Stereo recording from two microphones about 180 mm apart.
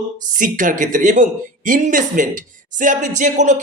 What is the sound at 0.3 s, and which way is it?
Speech, 50° right (ahead or behind).